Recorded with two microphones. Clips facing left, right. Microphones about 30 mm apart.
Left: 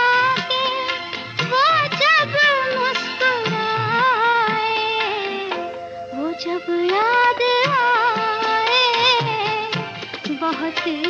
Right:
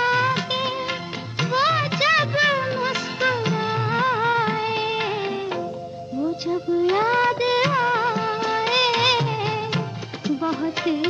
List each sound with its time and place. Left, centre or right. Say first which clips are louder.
0.0 s music of bollywood: left 4 dB; left
1.4 s music: left 4 dB; left
6.2 s music: even; left
6.9 s music of bollywood: left 5 dB; left
9.2 s music of bollywood: left 3 dB; left
10.8 s music of bollywood: even; centre